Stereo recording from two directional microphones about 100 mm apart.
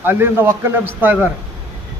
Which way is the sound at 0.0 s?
20° right (ahead or behind).